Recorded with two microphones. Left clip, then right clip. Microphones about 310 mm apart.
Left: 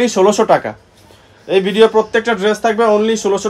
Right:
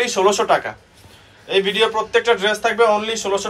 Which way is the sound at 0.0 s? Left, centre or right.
Left.